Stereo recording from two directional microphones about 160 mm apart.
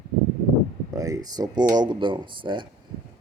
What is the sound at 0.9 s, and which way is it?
Speech, 20° right (ahead or behind).